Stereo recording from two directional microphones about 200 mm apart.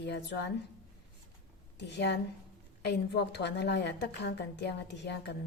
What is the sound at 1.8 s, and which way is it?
A woman's voice, 60° left (ahead or behind).